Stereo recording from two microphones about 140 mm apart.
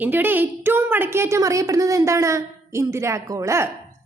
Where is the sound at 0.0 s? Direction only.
15° right (ahead or behind).